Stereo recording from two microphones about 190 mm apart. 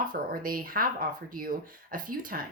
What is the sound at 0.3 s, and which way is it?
Speech, 50° right (ahead or behind).